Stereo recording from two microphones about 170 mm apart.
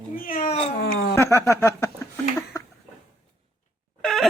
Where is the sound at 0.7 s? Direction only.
75° left (ahead or behind).